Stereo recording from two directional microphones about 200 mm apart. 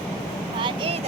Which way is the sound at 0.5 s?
25° right (ahead or behind).